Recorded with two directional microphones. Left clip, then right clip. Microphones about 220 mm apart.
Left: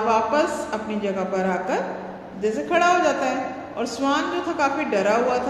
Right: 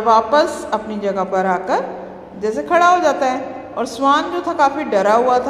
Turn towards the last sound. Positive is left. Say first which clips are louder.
# right 7 dB
turn(degrees=-25)  # may be behind; listen again after turning